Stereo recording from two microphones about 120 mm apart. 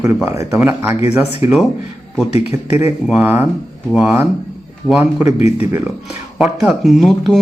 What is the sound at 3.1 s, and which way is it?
Speech, 10° right (ahead or behind).